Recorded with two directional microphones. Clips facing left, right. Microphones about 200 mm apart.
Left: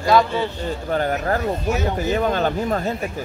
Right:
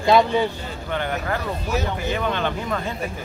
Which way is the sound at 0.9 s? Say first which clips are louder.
Left 4 dB; 40° left (ahead or behind).